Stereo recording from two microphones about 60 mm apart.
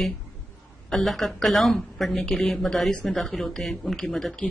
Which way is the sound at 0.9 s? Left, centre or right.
Centre.